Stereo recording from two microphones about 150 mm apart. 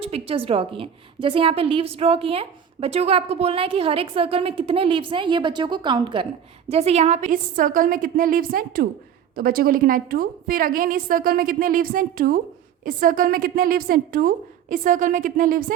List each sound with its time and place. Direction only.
0.0 s a woman's voice: 40° right (ahead or behind)
6.7 s a woman's voice: 45° right (ahead or behind); by 15.6 s 65° right (ahead or behind)